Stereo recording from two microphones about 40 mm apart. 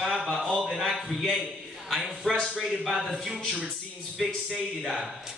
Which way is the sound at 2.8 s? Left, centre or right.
Centre.